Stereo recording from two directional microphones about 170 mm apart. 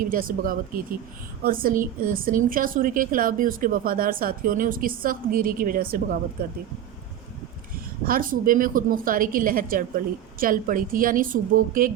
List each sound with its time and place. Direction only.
0.0 s a woman's voice: 55° right (ahead or behind)
8.0 s a woman's voice: 55° right (ahead or behind)